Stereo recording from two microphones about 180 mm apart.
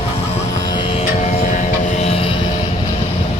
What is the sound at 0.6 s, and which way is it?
Music, 25° left (ahead or behind).